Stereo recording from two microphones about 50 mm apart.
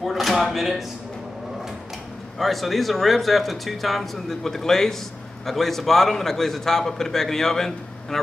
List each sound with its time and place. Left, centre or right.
0.0 s speech: centre
2.3 s a man's voice: centre